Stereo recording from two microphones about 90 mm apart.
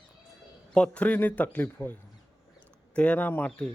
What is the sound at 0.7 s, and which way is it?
A man's voice, 15° left (ahead or behind).